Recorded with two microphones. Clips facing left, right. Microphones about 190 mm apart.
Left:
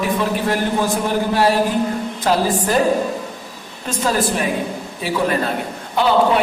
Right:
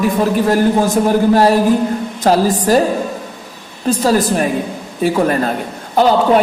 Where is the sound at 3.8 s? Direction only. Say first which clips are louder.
Right 6 dB; 35° right (ahead or behind).